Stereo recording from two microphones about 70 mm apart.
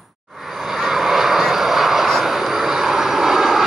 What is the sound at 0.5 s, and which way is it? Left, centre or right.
Vehicle, centre.